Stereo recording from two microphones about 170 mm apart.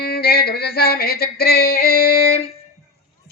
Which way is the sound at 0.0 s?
65° left (ahead or behind).